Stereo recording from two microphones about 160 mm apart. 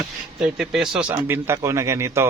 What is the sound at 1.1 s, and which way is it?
Speech, 15° right (ahead or behind).